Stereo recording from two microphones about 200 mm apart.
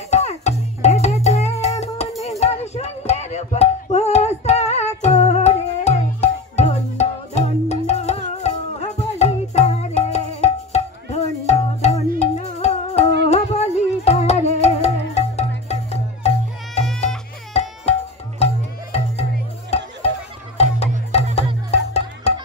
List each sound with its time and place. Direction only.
0.1 s music: 35° left (ahead or behind)
17.5 s tabla: 30° left (ahead or behind)
18.4 s music: 30° left (ahead or behind)